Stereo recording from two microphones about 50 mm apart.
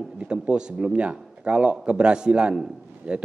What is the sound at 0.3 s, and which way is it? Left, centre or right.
Speech, right.